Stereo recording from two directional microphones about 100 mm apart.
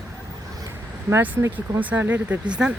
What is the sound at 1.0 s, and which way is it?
Speech, 20° right (ahead or behind).